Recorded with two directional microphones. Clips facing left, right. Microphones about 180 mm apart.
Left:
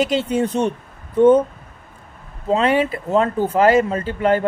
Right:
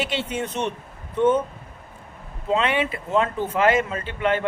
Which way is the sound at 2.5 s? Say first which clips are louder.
Left 5 dB; 40° left (ahead or behind).